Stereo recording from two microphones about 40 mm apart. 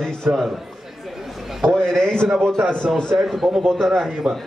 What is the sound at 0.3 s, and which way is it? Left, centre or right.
Speech, right.